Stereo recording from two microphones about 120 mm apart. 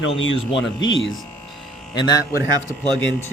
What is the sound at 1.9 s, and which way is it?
Speech, 35° left (ahead or behind).